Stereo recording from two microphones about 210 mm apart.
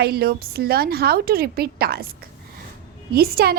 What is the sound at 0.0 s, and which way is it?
A woman's voice, 50° right (ahead or behind).